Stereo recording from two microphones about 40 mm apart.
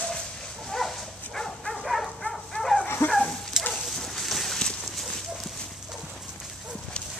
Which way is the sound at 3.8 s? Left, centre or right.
Centre.